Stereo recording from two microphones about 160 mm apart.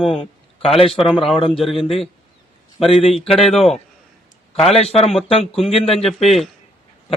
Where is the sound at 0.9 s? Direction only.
Centre (ahead or behind).